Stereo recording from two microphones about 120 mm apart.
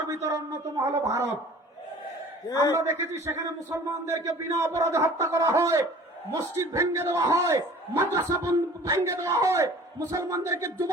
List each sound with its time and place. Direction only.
0.1 s a man's voice: 25° right (ahead or behind)
2.5 s a man's voice: 30° left (ahead or behind)
2.7 s a man's voice: 25° right (ahead or behind)